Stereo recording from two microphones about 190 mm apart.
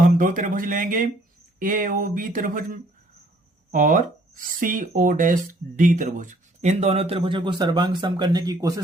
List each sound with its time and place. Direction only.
0.0 s speech: 45° right (ahead or behind); by 8.8 s 20° right (ahead or behind)